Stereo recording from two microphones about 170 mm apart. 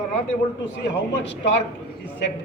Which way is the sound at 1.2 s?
90° left.